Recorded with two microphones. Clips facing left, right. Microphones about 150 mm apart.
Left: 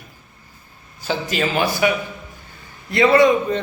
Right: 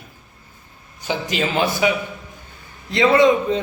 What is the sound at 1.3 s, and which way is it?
Speech, 20° right (ahead or behind).